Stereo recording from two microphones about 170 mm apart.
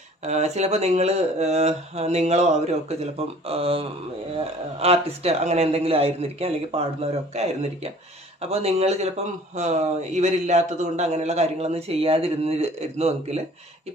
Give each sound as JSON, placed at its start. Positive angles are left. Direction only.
{"t": 0.3, "sound": "speech", "side_deg": -40}